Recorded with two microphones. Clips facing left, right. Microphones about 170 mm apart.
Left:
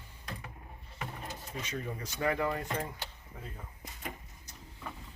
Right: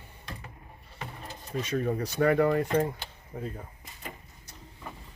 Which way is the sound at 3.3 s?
45° right (ahead or behind).